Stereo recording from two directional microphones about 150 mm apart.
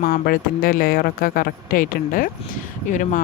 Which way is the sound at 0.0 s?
75° left (ahead or behind).